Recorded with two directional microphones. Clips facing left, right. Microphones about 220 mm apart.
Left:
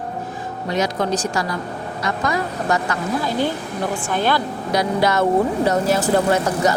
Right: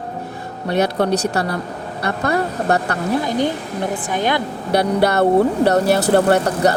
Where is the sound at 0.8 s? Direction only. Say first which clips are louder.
Right 4 dB; 65° right (ahead or behind).